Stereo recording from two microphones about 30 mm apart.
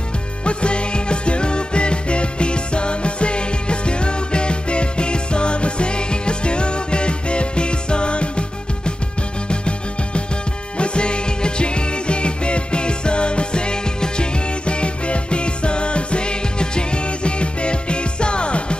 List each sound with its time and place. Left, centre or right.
0.5 s music: left